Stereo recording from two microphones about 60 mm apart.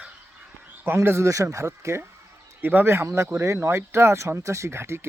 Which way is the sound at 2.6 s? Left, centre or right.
Right.